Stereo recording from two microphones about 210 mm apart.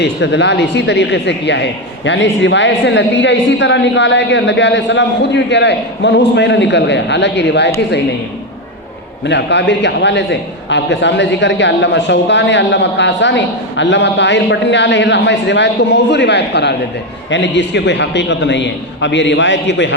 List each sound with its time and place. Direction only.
0.0 s a man's voice: 55° left (ahead or behind)
9.2 s a man's voice: 55° left (ahead or behind)